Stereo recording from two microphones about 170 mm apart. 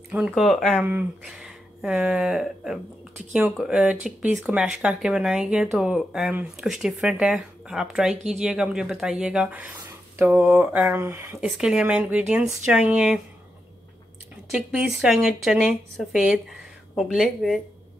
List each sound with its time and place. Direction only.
0.1 s speech: 5° right (ahead or behind)
11.3 s speech: 5° right (ahead or behind)
14.5 s speech: 5° right (ahead or behind)